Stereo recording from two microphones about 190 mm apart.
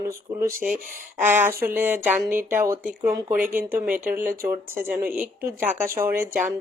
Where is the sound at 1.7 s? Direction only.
10° right (ahead or behind).